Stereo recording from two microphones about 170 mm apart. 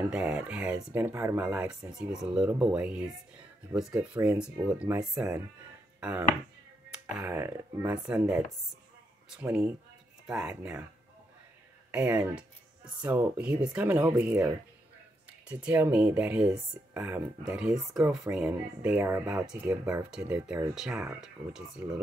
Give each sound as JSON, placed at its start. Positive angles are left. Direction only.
{"t": 0.1, "sound": "speech", "side_deg": -5}
{"t": 9.4, "sound": "speech", "side_deg": -10}
{"t": 11.9, "sound": "speech", "side_deg": -5}